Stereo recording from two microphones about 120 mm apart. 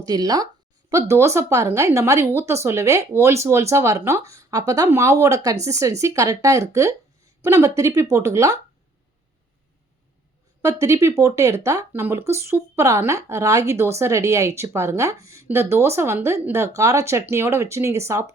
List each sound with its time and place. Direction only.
0.0 s speech: 35° right (ahead or behind)
10.6 s speech: 25° right (ahead or behind)